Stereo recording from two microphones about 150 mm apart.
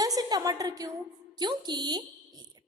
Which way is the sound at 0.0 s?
25° right (ahead or behind).